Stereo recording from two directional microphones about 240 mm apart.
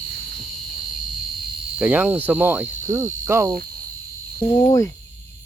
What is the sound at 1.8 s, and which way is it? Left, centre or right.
Cricket, centre.